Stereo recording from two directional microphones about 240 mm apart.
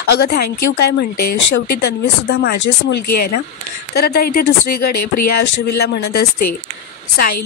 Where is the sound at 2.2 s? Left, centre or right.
Left.